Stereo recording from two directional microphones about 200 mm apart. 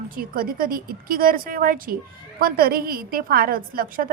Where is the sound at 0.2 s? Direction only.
45° right (ahead or behind).